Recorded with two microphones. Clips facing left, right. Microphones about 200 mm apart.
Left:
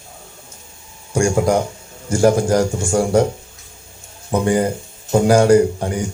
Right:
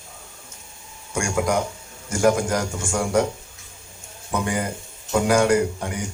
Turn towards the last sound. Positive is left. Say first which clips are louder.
# left 8 dB
turn(degrees=35)  # may be behind; listen again after turning